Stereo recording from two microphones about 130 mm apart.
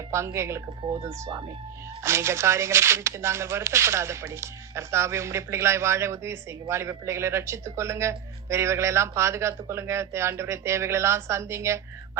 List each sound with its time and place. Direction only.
0.1 s speech: 20° right (ahead or behind)
0.8 s speech: 40° right (ahead or behind)
2.0 s speech: 20° right (ahead or behind)